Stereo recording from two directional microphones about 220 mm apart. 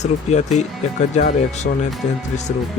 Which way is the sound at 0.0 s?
30° left (ahead or behind).